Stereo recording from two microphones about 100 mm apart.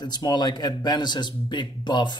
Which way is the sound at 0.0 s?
45° left (ahead or behind).